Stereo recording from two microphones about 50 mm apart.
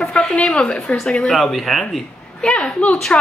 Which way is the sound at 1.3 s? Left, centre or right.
Centre.